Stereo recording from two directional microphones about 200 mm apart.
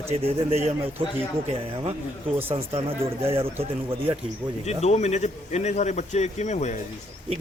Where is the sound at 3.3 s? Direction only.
30° right (ahead or behind).